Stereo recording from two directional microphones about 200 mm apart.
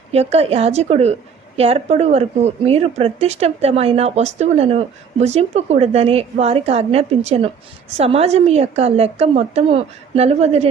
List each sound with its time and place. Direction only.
0.1 s speech: 30° right (ahead or behind)